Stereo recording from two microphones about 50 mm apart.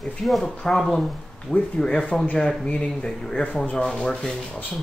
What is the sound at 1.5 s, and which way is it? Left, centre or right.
Speech, centre.